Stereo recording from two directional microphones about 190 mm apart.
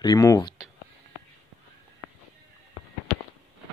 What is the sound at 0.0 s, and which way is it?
Speech, 20° left (ahead or behind).